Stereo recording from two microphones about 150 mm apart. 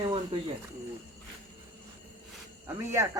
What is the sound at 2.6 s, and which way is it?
Speech, 15° right (ahead or behind).